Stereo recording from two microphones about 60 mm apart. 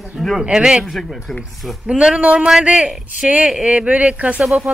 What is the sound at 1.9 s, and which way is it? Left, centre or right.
Speech, centre.